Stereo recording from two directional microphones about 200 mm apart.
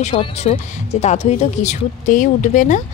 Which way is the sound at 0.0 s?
30° left (ahead or behind).